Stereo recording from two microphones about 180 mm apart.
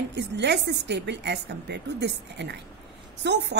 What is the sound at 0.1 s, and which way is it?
A woman's voice, 70° right (ahead or behind).